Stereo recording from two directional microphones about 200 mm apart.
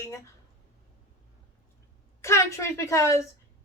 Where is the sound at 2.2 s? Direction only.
15° left (ahead or behind).